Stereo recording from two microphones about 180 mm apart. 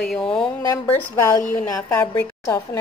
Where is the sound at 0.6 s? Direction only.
15° left (ahead or behind).